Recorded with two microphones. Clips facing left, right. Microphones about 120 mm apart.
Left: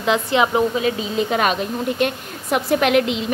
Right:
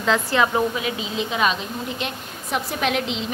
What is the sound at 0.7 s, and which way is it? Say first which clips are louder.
Speech: left 6 dB; 35° left (ahead or behind).